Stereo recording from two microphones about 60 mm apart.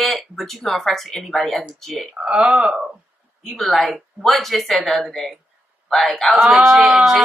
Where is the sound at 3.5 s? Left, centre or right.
Centre.